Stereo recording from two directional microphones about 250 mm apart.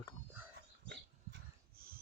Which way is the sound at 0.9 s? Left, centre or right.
Right.